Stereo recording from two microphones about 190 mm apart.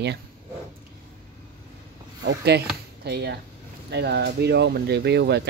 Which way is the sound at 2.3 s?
60° right (ahead or behind).